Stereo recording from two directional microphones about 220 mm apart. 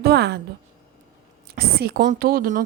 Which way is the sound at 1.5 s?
45° right (ahead or behind).